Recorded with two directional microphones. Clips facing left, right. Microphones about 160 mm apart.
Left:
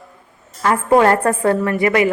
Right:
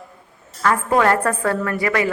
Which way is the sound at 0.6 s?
25° left (ahead or behind).